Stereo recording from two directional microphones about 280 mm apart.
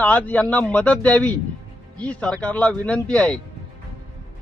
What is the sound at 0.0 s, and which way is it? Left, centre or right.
Speech, centre.